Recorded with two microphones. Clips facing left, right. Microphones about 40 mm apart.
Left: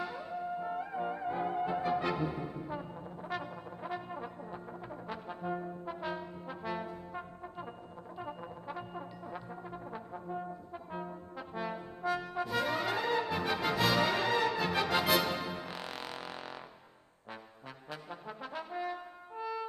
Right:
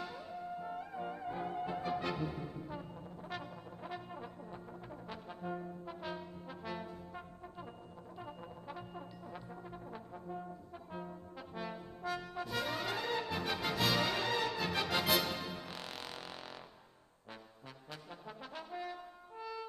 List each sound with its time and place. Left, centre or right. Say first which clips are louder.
0.0 s music: left 6 dB; centre
3.4 s brass instrument: left 5 dB; centre
18.2 s brass instrument: left 5 dB; centre